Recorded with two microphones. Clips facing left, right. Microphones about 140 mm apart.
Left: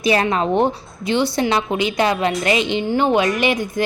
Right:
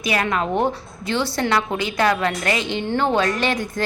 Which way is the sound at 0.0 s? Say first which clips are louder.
Left 4 dB; 30° left (ahead or behind).